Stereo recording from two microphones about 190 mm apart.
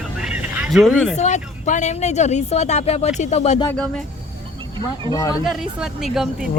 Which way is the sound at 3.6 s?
5° left (ahead or behind).